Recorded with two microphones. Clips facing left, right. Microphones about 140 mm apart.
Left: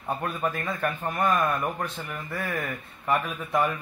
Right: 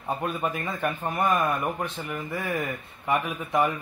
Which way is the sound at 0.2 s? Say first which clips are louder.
Right 1 dB; 15° right (ahead or behind).